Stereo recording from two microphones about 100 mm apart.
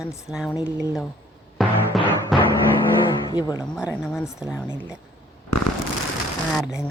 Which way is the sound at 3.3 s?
45° left (ahead or behind).